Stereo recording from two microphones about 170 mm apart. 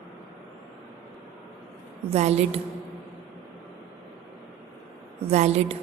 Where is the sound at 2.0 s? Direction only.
40° right (ahead or behind).